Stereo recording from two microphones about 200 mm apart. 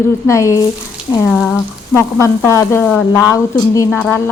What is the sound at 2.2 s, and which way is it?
Speech, 15° left (ahead or behind).